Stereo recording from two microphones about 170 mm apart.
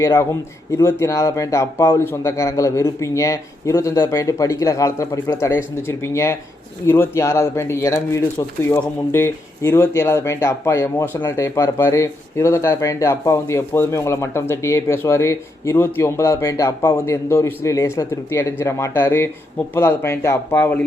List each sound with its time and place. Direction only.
0.0 s speech: 20° left (ahead or behind)